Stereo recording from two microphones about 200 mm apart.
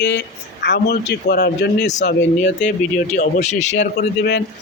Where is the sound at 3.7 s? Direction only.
60° left (ahead or behind).